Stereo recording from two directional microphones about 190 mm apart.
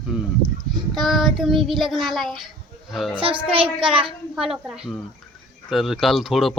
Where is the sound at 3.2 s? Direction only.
30° right (ahead or behind).